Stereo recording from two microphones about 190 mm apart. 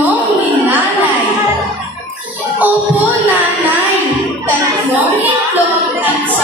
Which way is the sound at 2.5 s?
10° right (ahead or behind).